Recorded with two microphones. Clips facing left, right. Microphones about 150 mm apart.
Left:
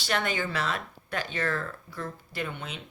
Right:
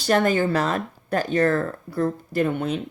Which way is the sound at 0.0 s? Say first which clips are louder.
Right 10 dB; 40° right (ahead or behind).